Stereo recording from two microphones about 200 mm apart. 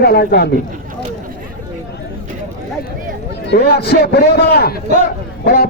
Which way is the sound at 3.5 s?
55° left (ahead or behind).